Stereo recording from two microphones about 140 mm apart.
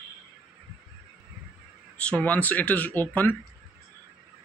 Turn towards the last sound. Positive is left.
turn(degrees=10)  # may be behind; listen again after turning